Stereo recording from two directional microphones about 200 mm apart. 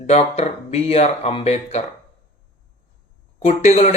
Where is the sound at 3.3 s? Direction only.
35° left (ahead or behind).